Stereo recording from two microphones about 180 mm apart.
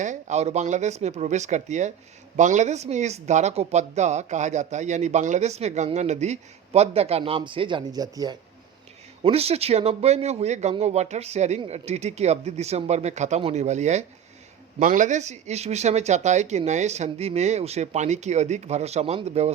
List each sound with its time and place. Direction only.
0.0 s speech: 40° right (ahead or behind); by 8.4 s 20° right (ahead or behind)
9.2 s speech: 35° right (ahead or behind)